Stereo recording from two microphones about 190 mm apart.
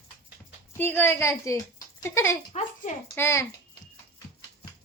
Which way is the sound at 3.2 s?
15° left (ahead or behind).